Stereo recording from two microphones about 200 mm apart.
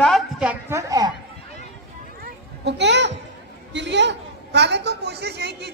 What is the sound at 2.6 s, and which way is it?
A woman's voice, 60° right (ahead or behind).